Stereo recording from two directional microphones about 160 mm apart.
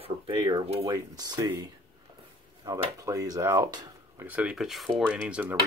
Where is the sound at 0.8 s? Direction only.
25° right (ahead or behind).